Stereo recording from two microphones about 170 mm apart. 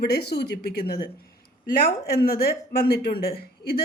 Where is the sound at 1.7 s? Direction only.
60° left (ahead or behind).